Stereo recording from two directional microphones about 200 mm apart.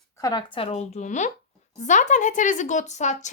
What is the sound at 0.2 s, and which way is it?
A woman's voice, 20° left (ahead or behind).